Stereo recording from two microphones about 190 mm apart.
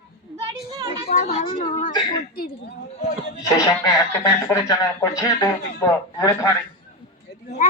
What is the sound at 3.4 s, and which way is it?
Speech, 20° left (ahead or behind).